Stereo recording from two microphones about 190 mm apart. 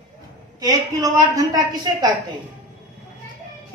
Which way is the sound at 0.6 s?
20° right (ahead or behind).